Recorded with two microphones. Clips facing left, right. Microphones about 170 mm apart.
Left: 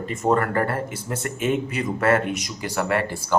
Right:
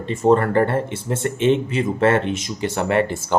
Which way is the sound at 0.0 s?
25° right (ahead or behind).